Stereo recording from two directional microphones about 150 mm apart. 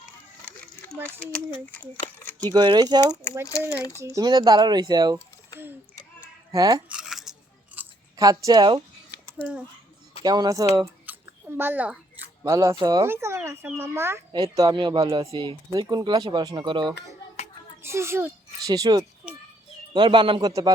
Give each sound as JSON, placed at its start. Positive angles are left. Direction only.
{"t": 0.9, "sound": "a sound", "side_deg": -15}
{"t": 2.1, "sound": "speech", "side_deg": 15}
{"t": 2.5, "sound": "speech", "side_deg": -30}
{"t": 3.8, "sound": "speech", "side_deg": 20}
{"t": 4.0, "sound": "speech", "side_deg": -25}
{"t": 6.5, "sound": "speech", "side_deg": -25}
{"t": 6.8, "sound": "a sound", "side_deg": -5}
{"t": 8.2, "sound": "speech", "side_deg": -25}
{"t": 9.4, "sound": "speech", "side_deg": -10}
{"t": 10.2, "sound": "speech", "side_deg": -25}
{"t": 11.0, "sound": "a sound", "side_deg": -15}
{"t": 12.8, "sound": "speech", "side_deg": -25}
{"t": 17.8, "sound": "a child's voice", "side_deg": -15}